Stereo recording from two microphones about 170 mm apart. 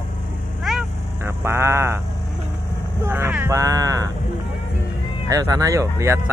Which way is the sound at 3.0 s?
15° right (ahead or behind).